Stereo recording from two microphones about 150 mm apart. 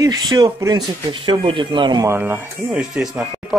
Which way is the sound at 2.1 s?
15° right (ahead or behind).